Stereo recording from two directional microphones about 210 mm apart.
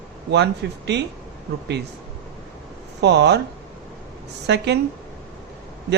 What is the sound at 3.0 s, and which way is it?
Speech, 55° right (ahead or behind).